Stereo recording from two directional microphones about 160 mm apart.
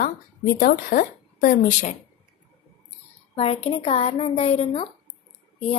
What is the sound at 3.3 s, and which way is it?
Speech, 40° left (ahead or behind).